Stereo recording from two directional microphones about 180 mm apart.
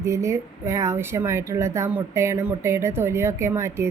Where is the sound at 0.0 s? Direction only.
15° right (ahead or behind).